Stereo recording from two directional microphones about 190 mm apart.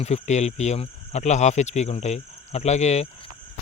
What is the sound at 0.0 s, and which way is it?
Speech, 35° left (ahead or behind).